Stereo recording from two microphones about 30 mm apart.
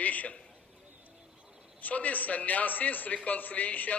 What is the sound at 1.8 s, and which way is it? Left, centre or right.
A man's voice, left.